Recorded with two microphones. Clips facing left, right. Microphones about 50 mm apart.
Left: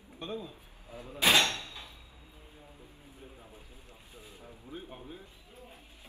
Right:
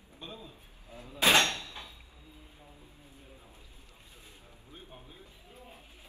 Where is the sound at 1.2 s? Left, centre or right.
Right.